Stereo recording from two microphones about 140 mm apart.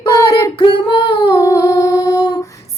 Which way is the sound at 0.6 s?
35° left (ahead or behind).